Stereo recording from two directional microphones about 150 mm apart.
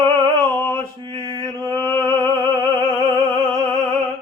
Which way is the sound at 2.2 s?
25° right (ahead or behind).